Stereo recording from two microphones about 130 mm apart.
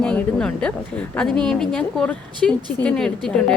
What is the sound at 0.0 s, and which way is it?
A woman's voice, 5° left (ahead or behind).